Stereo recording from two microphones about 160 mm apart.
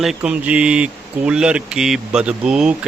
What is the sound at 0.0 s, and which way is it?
Speech, 5° right (ahead or behind).